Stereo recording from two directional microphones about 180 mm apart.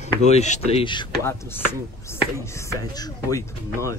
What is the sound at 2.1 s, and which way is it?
Speech, 15° left (ahead or behind).